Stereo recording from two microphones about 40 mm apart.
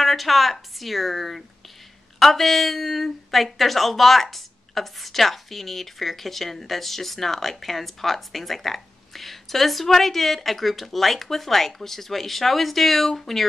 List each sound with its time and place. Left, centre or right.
0.0 s a woman's voice: centre